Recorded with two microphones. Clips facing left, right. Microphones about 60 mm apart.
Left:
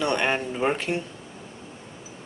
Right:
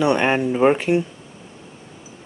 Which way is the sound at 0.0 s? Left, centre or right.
Centre.